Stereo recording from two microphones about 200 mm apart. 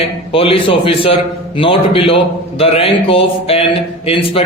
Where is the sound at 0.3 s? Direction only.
30° left (ahead or behind).